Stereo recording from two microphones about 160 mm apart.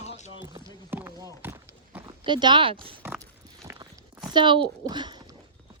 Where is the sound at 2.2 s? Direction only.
30° right (ahead or behind).